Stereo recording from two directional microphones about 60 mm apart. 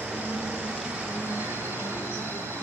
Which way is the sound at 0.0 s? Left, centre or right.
Right.